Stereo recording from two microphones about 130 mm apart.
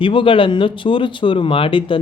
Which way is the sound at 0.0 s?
40° left (ahead or behind).